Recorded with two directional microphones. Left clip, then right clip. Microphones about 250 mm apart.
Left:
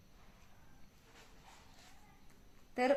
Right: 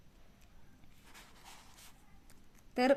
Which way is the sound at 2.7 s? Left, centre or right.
Right.